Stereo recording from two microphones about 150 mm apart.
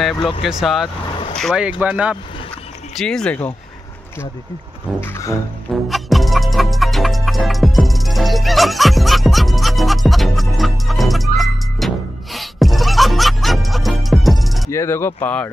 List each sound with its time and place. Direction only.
0.4 s speech: centre (ahead or behind)
3.0 s speech: 5° left (ahead or behind)
5.0 s speech: 15° left (ahead or behind)
5.9 s music: centre (ahead or behind)
14.7 s speech: 20° left (ahead or behind)